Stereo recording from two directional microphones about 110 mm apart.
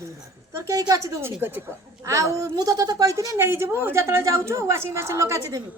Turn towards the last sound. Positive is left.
turn(degrees=-30)  # may be behind; listen again after turning